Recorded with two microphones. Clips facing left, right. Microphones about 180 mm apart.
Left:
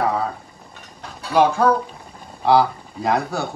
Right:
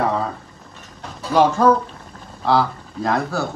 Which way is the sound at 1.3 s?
10° left (ahead or behind).